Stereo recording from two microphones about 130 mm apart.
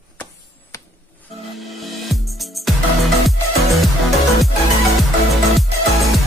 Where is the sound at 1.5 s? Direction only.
Centre (ahead or behind).